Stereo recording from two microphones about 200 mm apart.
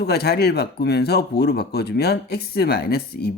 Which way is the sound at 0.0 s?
55° left (ahead or behind).